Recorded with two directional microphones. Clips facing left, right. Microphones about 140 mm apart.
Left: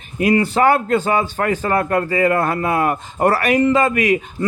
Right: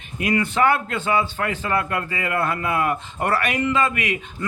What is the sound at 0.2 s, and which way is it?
A man's voice, 35° left (ahead or behind).